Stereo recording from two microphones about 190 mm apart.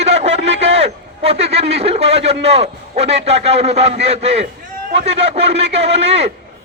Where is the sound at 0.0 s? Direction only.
35° right (ahead or behind).